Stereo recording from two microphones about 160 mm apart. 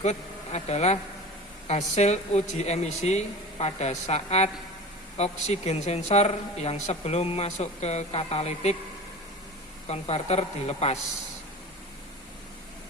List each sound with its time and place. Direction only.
0.0 s speech: 45° left (ahead or behind)
9.8 s speech: 40° left (ahead or behind)